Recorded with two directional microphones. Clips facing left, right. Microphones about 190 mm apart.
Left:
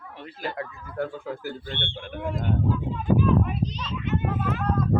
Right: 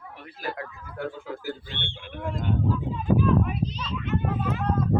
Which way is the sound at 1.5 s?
55° left (ahead or behind).